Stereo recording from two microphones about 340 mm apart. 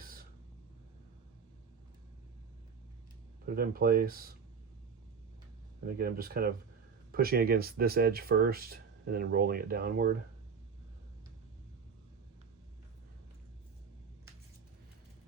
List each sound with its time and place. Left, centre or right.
0.0 s a sound: right
3.4 s speech: right
5.8 s speech: right